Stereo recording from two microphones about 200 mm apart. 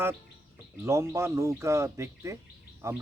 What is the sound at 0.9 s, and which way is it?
Speech, 15° right (ahead or behind).